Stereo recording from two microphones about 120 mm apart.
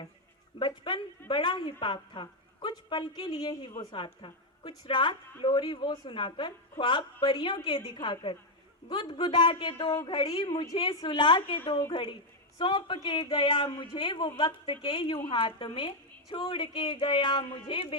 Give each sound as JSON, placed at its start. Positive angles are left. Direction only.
{"t": 0.6, "sound": "a woman's voice", "side_deg": 40}